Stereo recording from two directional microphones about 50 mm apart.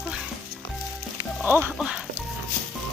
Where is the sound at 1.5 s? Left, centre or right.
Right.